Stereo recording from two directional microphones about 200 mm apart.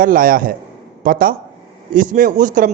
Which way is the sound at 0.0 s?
45° right (ahead or behind).